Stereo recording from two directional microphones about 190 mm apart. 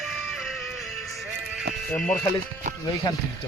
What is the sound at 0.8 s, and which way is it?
Music, centre (ahead or behind).